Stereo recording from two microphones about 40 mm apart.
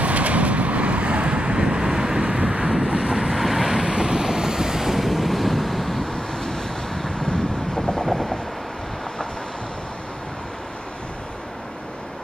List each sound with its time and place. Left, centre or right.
0.0 s vehicle: right; by 3.8 s centre
3.8 s vehicle: centre
6.1 s vehicle: centre
7.7 s train: centre